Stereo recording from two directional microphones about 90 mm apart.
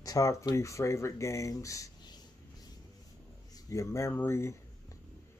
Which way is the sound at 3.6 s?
35° left (ahead or behind).